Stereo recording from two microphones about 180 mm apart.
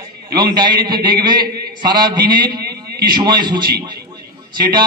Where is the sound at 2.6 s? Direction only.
60° right (ahead or behind).